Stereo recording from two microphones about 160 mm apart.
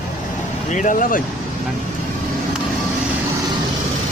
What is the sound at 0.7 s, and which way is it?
Speech, 55° left (ahead or behind).